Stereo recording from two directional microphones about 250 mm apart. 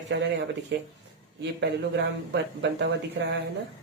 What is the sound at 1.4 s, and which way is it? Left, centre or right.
Speech, right.